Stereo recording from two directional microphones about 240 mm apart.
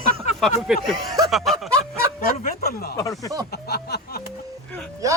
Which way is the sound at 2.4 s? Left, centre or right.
Left.